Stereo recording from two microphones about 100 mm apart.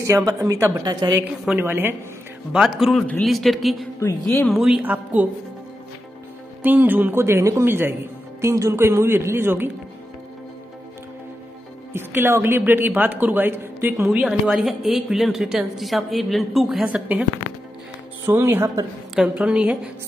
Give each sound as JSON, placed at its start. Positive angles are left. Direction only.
{"t": 0.0, "sound": "a woman's voice", "side_deg": -35}
{"t": 1.6, "sound": "a man's voice", "side_deg": -25}
{"t": 2.5, "sound": "a woman's voice", "side_deg": -5}
{"t": 3.0, "sound": "a woman's voice", "side_deg": 10}
{"t": 4.8, "sound": "a woman's voice", "side_deg": -15}
{"t": 6.6, "sound": "a man's voice", "side_deg": -20}
{"t": 11.9, "sound": "a man's voice", "side_deg": -20}
{"t": 14.1, "sound": "a woman's voice", "side_deg": -10}
{"t": 16.8, "sound": "a woman's voice", "side_deg": -10}
{"t": 18.2, "sound": "a man's voice", "side_deg": -25}
{"t": 19.2, "sound": "a woman's voice", "side_deg": -10}